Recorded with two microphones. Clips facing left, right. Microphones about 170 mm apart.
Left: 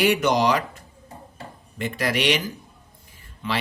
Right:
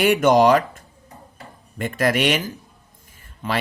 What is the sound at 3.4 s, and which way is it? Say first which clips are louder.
Speech: right 2 dB; 45° right (ahead or behind).